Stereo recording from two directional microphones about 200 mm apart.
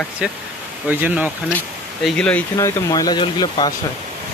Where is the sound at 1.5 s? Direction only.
5° left (ahead or behind); by 3.7 s 20° left (ahead or behind).